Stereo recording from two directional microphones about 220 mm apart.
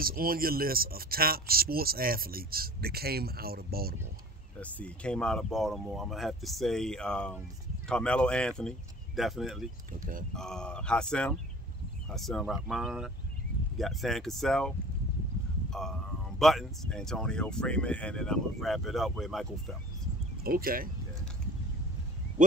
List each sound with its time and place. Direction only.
0.0 s speech: 40° right (ahead or behind)
4.6 s speech: 5° left (ahead or behind)
15.7 s speech: centre (ahead or behind)
20.4 s speech: 40° right (ahead or behind)